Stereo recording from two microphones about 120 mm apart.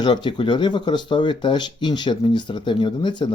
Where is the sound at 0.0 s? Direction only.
40° left (ahead or behind).